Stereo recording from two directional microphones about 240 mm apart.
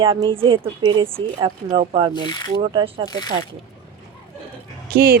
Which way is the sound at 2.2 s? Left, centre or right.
Centre.